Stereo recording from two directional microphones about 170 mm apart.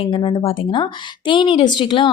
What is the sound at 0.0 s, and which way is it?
A woman's voice, 30° left (ahead or behind).